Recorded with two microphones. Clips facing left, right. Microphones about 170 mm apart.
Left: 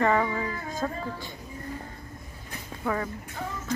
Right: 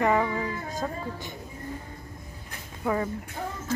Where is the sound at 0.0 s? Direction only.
10° right (ahead or behind).